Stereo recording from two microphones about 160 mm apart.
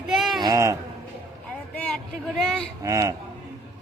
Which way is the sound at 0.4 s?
20° right (ahead or behind).